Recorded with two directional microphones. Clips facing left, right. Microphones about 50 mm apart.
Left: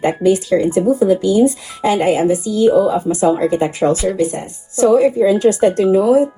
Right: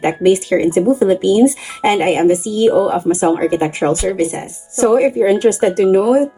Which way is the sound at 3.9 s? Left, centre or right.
Centre.